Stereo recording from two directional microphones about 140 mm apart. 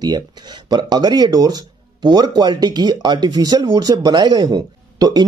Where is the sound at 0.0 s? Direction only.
30° right (ahead or behind).